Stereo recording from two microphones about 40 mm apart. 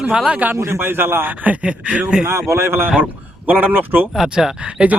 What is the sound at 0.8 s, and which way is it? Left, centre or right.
Speech, right.